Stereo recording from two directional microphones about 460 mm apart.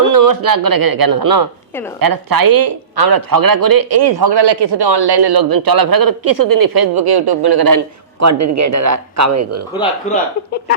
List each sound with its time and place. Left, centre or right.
0.1 s speech: right